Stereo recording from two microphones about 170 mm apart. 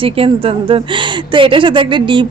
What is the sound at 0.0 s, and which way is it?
A woman's voice, 35° right (ahead or behind).